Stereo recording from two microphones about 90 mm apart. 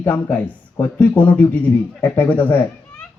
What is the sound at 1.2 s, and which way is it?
A child's voice, 20° left (ahead or behind).